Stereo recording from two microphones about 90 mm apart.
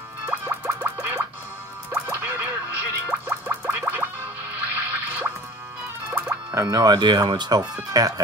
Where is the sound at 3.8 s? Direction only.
25° right (ahead or behind).